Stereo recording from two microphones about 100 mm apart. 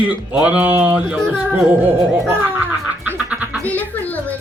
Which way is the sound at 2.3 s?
25° right (ahead or behind).